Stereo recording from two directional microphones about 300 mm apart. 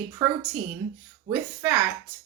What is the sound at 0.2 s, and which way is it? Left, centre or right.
Speech, centre.